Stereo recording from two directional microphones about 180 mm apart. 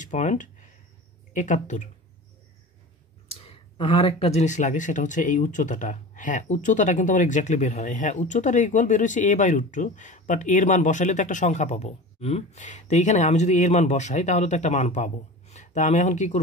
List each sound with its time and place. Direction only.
0.0 s speech: 45° left (ahead or behind)
3.3 s speech: 35° left (ahead or behind)